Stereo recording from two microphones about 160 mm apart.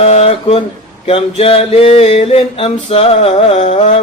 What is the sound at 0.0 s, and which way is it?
Speech, 40° left (ahead or behind).